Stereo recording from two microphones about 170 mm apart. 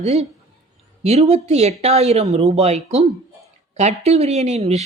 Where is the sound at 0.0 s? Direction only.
40° right (ahead or behind).